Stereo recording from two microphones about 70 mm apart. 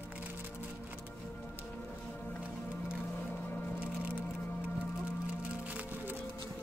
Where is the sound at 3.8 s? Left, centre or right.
Centre.